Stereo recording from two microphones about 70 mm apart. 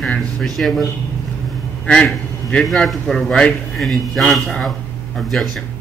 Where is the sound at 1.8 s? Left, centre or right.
Centre.